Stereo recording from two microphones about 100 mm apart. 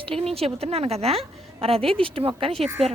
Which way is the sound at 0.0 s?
75° right (ahead or behind).